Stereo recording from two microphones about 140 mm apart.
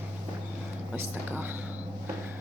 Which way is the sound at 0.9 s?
15° right (ahead or behind).